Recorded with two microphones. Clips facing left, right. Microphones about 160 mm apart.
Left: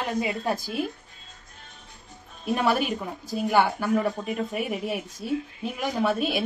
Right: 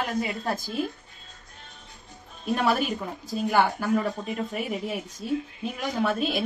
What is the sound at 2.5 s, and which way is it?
Speech, 5° left (ahead or behind).